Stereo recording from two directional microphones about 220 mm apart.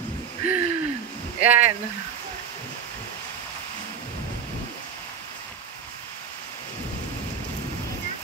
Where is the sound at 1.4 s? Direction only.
30° right (ahead or behind).